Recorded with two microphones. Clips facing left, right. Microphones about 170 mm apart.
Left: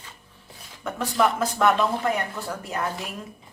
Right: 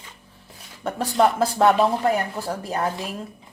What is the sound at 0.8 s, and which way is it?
Speech, 35° right (ahead or behind).